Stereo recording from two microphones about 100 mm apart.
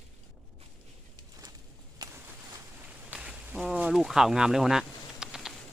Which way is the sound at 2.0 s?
45° right (ahead or behind).